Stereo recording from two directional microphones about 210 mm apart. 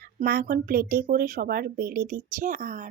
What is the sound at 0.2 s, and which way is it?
Speech, 40° right (ahead or behind).